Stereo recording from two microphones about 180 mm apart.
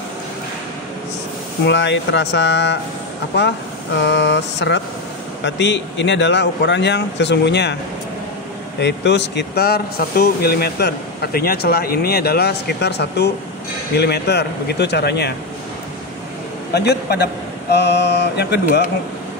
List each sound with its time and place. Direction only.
1.6 s speech: 75° left (ahead or behind)
8.7 s speech: 70° left (ahead or behind)
16.7 s speech: 65° left (ahead or behind)